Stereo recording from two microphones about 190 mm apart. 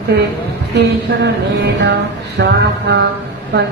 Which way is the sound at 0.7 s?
60° right (ahead or behind).